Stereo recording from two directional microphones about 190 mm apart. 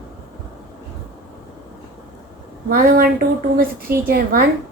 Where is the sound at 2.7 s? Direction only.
50° right (ahead or behind).